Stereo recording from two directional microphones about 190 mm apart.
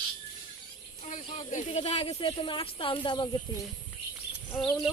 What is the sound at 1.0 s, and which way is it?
Speech, 35° left (ahead or behind).